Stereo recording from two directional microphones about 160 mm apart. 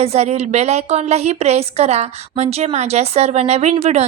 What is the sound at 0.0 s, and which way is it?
A woman's voice, 40° right (ahead or behind).